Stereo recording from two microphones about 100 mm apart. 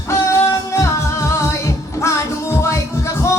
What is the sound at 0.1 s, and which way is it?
Music, 30° left (ahead or behind).